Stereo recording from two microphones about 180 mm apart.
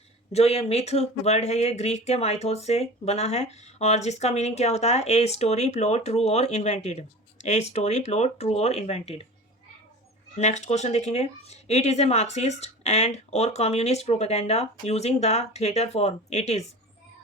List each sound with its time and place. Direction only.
0.3 s speech: 35° left (ahead or behind)
10.3 s speech: 40° left (ahead or behind)